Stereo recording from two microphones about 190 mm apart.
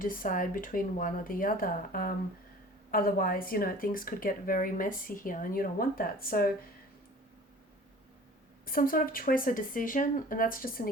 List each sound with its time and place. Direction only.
0.0 s speech: 50° left (ahead or behind)
8.6 s speech: 50° left (ahead or behind)